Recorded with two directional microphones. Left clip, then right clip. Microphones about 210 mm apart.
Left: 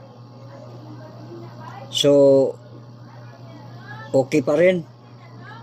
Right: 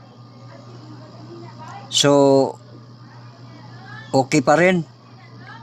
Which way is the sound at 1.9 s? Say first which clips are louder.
Even; 55° right (ahead or behind).